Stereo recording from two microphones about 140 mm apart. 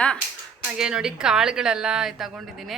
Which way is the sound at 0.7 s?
5° right (ahead or behind).